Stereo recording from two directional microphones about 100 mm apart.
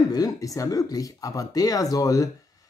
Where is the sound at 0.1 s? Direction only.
35° left (ahead or behind).